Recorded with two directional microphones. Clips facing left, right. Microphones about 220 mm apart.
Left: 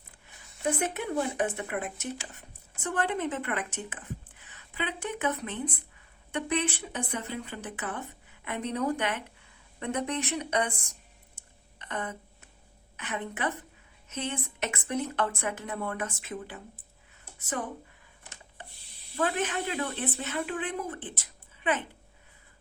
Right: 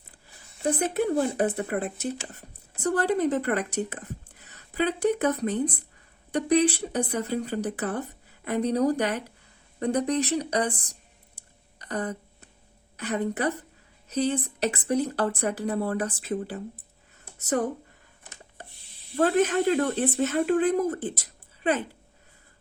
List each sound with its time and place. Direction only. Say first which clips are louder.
0.6 s speech: right 5 dB; 35° right (ahead or behind)
11.3 s a sound: even; 35° right (ahead or behind)
13.0 s speech: right 7 dB; 40° right (ahead or behind)
18.6 s chopping: right 2 dB; 40° right (ahead or behind)
19.1 s speech: right 8 dB; 40° right (ahead or behind)